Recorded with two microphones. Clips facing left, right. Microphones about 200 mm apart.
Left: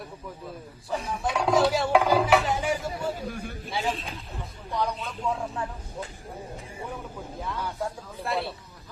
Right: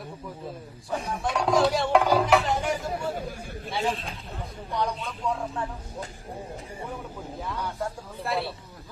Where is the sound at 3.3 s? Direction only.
60° left (ahead or behind).